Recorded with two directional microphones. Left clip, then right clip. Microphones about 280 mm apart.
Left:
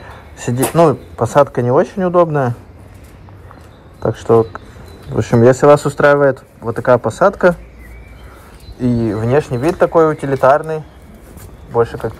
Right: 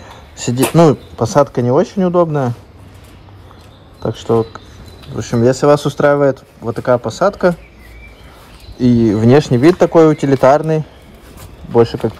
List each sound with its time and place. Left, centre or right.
0.0 s a sound: right
1.3 s speech: right
4.0 s speech: right
5.1 s speech: centre
8.7 s speech: right